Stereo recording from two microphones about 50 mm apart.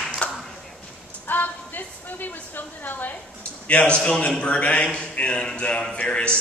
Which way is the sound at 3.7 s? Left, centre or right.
Left.